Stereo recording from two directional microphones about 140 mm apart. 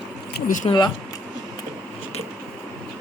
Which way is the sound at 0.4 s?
65° left (ahead or behind).